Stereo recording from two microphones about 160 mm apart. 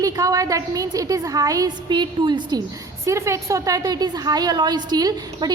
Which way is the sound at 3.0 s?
20° right (ahead or behind).